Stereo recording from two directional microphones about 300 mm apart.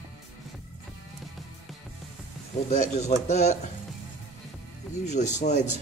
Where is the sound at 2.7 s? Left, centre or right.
Left.